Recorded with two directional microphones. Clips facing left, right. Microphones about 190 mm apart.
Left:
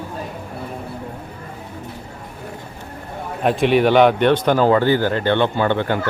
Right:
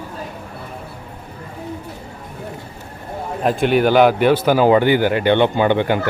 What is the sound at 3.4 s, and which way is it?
Speech, centre (ahead or behind).